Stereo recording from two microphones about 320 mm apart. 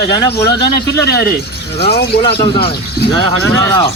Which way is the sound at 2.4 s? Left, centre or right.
Centre.